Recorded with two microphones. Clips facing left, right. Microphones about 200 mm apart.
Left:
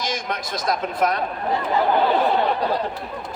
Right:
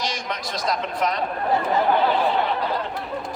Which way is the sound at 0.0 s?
50° left (ahead or behind).